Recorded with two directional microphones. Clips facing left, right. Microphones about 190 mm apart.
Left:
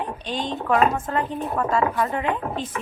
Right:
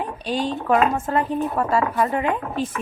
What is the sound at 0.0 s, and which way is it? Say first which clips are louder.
Speech: right 4 dB; 10° right (ahead or behind).